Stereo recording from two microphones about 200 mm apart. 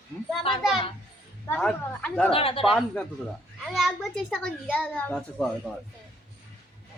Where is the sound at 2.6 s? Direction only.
Centre (ahead or behind).